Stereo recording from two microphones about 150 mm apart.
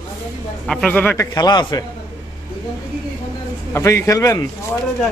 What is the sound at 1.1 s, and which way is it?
Speech, 25° left (ahead or behind).